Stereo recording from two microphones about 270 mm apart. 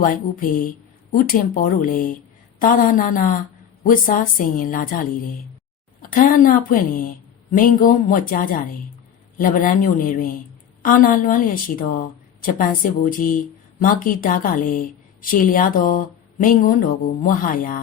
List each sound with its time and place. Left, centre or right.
0.0 s a woman's voice: left